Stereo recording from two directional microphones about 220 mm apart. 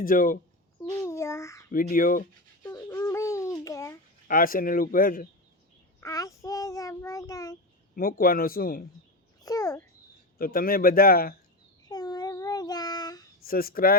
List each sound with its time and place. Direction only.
0.0 s speech: 40° left (ahead or behind)
0.8 s a sound: 15° left (ahead or behind)
1.7 s speech: 40° left (ahead or behind)
2.6 s babbling: 15° left (ahead or behind)
4.3 s speech: 40° left (ahead or behind)
6.0 s child singing: 15° left (ahead or behind)
7.9 s speech: 40° left (ahead or behind)
9.4 s a child's voice: 15° left (ahead or behind)
10.3 s speech: 40° left (ahead or behind)
11.9 s child singing: 20° left (ahead or behind)
13.4 s speech: 40° left (ahead or behind)